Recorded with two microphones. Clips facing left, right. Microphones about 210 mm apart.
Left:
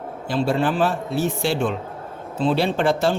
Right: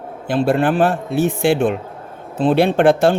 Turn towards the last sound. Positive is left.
turn(degrees=-55)  # may be behind; listen again after turning